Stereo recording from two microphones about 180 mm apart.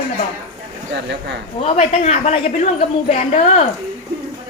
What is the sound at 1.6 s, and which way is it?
A woman's voice, 35° left (ahead or behind).